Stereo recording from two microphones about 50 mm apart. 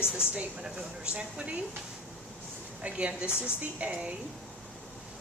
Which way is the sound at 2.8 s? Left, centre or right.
Right.